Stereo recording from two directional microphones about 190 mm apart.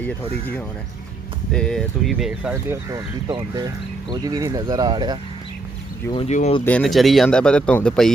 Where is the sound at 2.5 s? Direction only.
15° right (ahead or behind).